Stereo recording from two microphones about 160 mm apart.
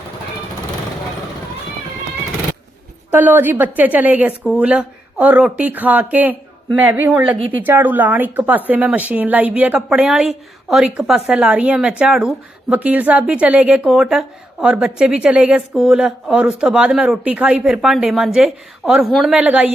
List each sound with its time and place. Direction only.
3.1 s speech: 10° right (ahead or behind)
7.3 s a woman's voice: 35° right (ahead or behind)
7.6 s speech: 10° right (ahead or behind)